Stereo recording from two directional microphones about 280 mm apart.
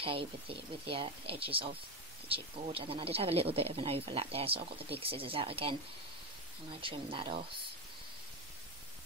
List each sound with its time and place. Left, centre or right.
0.0 s speech: centre
6.8 s speech: centre